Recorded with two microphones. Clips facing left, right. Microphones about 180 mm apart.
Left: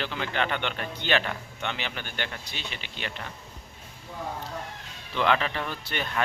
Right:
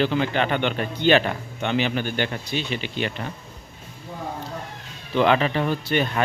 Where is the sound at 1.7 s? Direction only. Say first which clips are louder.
Right 12 dB; 15° right (ahead or behind).